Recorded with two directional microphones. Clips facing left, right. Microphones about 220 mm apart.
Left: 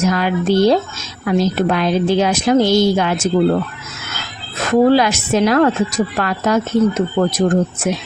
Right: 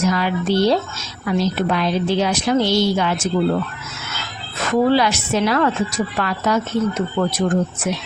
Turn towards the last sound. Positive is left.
turn(degrees=45)  # may be behind; listen again after turning